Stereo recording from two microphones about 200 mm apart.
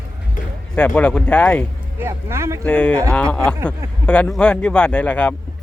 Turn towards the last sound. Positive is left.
turn(degrees=5)  # may be behind; listen again after turning